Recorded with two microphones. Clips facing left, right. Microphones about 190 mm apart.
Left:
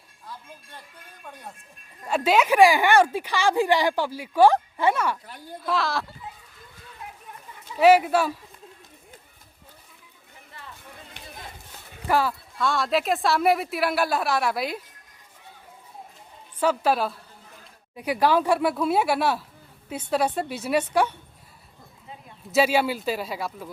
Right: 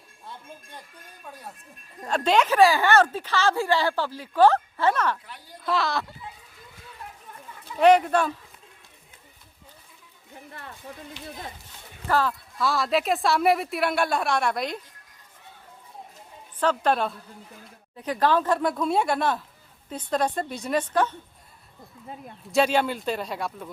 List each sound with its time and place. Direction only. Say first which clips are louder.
1.3 s a woman's voice: even; 5° right (ahead or behind)
2.0 s speech: left 1 dB; 5° left (ahead or behind)
5.2 s a woman's voice: left 5 dB; 45° left (ahead or behind)
5.6 s a woman's voice: even; centre (ahead or behind)
7.8 s speech: left 1 dB; 5° left (ahead or behind)
11.2 s speech: right 5 dB; 55° left (ahead or behind)
12.0 s speech: left 1 dB; 10° left (ahead or behind)
12.5 s a woman's voice: even; centre (ahead or behind)
16.6 s a woman's voice: left 1 dB; 5° left (ahead or behind)
22.5 s a woman's voice: left 1 dB; 5° left (ahead or behind)